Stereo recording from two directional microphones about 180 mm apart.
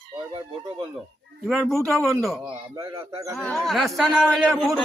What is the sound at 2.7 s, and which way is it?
Speech, 15° right (ahead or behind).